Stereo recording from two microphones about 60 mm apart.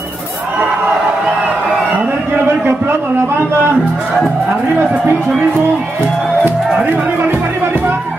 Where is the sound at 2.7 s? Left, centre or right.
Right.